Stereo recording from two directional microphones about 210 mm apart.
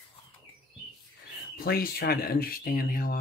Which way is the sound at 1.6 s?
45° left (ahead or behind).